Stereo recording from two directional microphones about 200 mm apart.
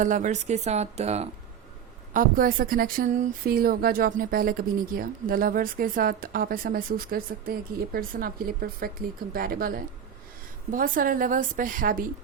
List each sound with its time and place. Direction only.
0.0 s speech: 40° right (ahead or behind)
2.1 s a woman's voice: 45° right (ahead or behind)